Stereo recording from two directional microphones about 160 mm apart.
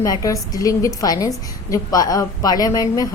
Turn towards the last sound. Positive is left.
turn(degrees=20)  # may be behind; listen again after turning